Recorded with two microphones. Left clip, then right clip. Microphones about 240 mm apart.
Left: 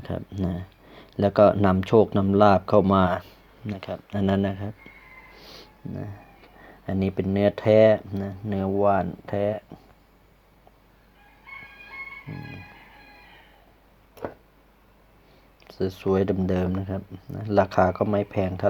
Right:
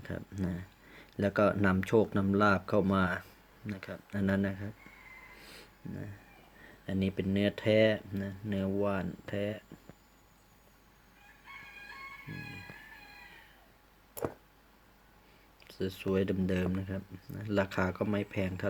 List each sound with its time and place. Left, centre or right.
0.0 s speech: centre
5.5 s a sound: centre
6.8 s speech: centre
15.6 s speech: centre